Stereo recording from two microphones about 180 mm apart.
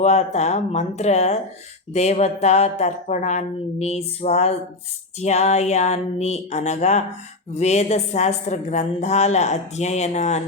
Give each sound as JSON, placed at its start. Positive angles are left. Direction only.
{"t": 0.0, "sound": "a woman's voice", "side_deg": 40}